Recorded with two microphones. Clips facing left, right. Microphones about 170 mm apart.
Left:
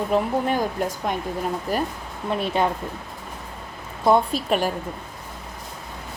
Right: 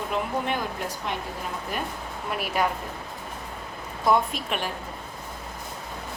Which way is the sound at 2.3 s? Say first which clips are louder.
Left 4 dB; 25° left (ahead or behind).